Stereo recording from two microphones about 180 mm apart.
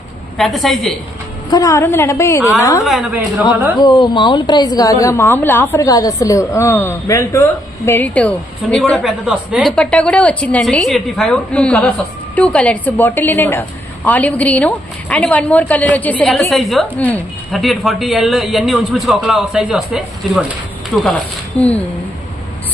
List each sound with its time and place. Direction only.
0.3 s speech: centre (ahead or behind)
1.5 s a woman's voice: 20° left (ahead or behind)
2.8 s a woman's voice: centre (ahead or behind)
3.8 s a woman's voice: 25° left (ahead or behind); by 9.7 s 5° right (ahead or behind)
9.7 s a woman's voice: 5° left (ahead or behind)